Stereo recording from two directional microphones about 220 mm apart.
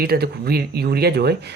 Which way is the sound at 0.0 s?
45° right (ahead or behind).